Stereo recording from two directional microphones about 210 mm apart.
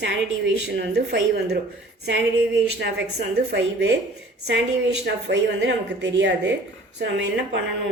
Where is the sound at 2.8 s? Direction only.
55° right (ahead or behind).